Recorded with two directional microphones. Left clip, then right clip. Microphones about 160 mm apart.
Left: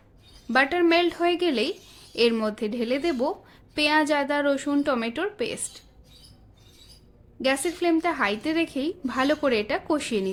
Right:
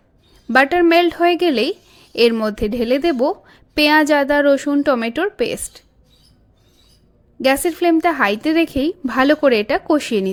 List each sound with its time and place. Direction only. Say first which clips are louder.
0.4 s a woman's voice: right 8 dB; 40° right (ahead or behind)
7.4 s a woman's voice: right 8 dB; 35° right (ahead or behind)